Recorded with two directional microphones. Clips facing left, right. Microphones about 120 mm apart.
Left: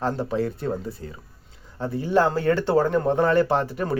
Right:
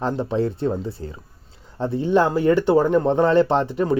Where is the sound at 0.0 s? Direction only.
20° right (ahead or behind).